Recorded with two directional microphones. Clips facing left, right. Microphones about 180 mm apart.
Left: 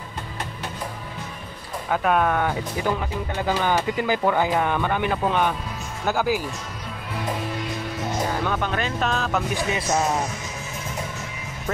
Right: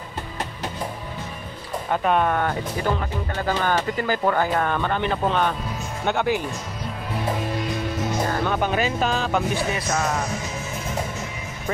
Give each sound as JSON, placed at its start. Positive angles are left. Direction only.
{"t": 1.9, "sound": "speech", "side_deg": 0}
{"t": 3.3, "sound": "speech", "side_deg": 15}
{"t": 8.5, "sound": "speech", "side_deg": -10}
{"t": 9.8, "sound": "speech", "side_deg": 25}